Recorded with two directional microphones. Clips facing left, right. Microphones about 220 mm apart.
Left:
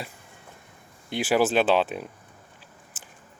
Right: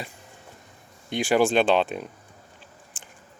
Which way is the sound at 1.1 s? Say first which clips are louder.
Right 1 dB; 5° left (ahead or behind).